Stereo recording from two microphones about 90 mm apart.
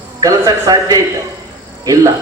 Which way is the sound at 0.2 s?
40° right (ahead or behind).